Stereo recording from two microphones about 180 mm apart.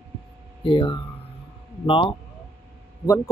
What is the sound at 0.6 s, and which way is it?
Speech, 30° left (ahead or behind).